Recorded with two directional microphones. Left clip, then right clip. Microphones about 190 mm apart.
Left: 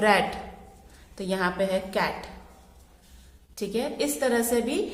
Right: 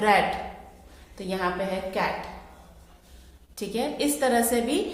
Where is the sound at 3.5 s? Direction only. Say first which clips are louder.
Even; 25° left (ahead or behind).